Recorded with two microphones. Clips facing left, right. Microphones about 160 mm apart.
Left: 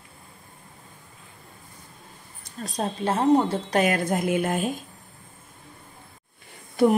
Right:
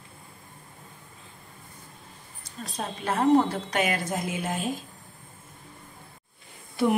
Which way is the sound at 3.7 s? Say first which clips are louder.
Left 6 dB; 45° left (ahead or behind).